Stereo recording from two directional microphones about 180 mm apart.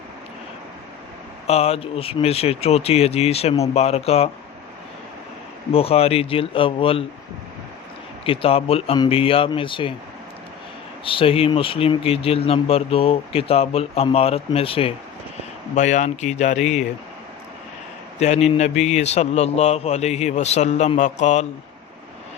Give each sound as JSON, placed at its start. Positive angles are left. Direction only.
{"t": 1.5, "sound": "speech", "side_deg": 35}
{"t": 5.7, "sound": "speech", "side_deg": 35}
{"t": 8.2, "sound": "speech", "side_deg": 30}
{"t": 11.0, "sound": "speech", "side_deg": 30}
{"t": 15.7, "sound": "speech", "side_deg": 40}
{"t": 18.2, "sound": "speech", "side_deg": 40}